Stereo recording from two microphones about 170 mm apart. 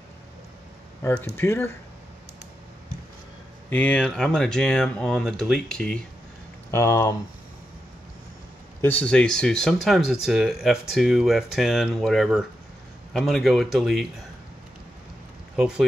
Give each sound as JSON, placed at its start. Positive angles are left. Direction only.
{"t": 1.0, "sound": "speech", "side_deg": 10}
{"t": 3.7, "sound": "speech", "side_deg": 10}
{"t": 6.7, "sound": "speech", "side_deg": 15}
{"t": 8.8, "sound": "speech", "side_deg": 5}
{"t": 15.5, "sound": "speech", "side_deg": -5}